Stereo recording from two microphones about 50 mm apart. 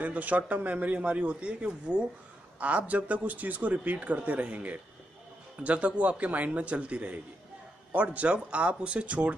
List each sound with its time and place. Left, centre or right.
0.0 s speech: right